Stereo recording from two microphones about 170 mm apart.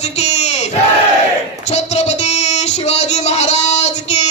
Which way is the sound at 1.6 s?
40° left (ahead or behind).